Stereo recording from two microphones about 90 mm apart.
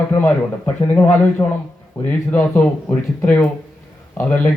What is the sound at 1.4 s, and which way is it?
Speech, 30° left (ahead or behind).